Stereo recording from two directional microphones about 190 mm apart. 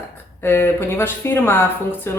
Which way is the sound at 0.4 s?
10° left (ahead or behind).